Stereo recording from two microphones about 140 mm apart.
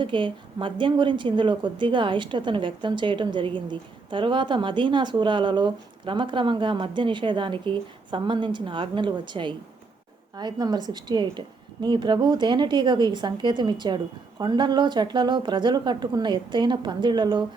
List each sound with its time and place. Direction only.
0.0 s a woman's voice: 35° right (ahead or behind)